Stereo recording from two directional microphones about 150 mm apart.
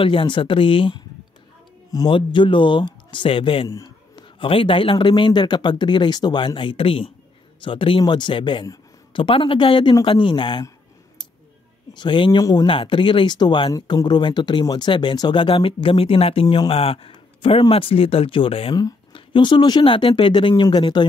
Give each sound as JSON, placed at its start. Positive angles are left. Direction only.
{"t": 0.0, "sound": "speech", "side_deg": 35}
{"t": 3.6, "sound": "speech", "side_deg": 25}
{"t": 11.9, "sound": "speech", "side_deg": 30}